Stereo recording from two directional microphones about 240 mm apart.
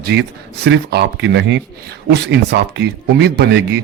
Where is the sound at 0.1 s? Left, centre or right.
Right.